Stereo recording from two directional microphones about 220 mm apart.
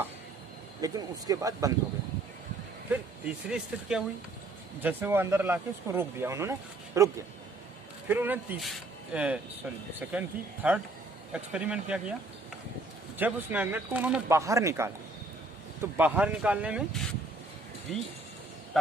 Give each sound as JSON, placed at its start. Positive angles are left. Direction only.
{"t": 0.8, "sound": "speech", "side_deg": -15}
{"t": 2.9, "sound": "speech", "side_deg": -5}
{"t": 13.1, "sound": "speech", "side_deg": -5}